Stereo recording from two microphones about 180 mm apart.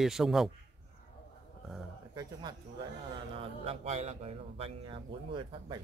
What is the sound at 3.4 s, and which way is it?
A man's voice, 35° right (ahead or behind).